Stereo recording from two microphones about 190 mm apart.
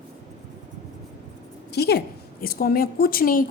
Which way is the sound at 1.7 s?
60° left (ahead or behind).